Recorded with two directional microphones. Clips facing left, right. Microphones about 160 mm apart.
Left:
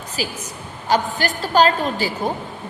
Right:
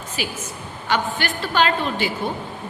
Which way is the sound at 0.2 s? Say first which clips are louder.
Left 2 dB; 35° left (ahead or behind).